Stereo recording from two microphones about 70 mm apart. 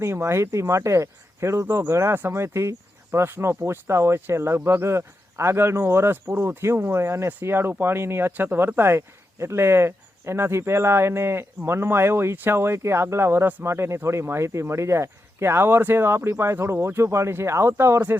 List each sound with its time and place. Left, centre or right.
0.0 s speech: right